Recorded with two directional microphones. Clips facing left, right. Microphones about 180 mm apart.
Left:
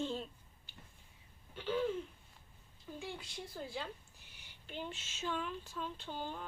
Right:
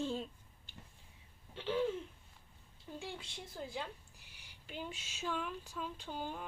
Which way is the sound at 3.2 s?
20° right (ahead or behind).